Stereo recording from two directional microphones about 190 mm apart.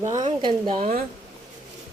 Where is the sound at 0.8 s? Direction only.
40° right (ahead or behind).